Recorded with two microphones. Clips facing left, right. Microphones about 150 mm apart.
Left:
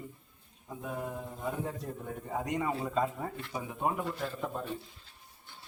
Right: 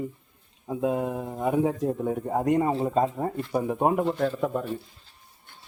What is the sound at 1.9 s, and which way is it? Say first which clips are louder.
Speech: right 11 dB; 55° right (ahead or behind).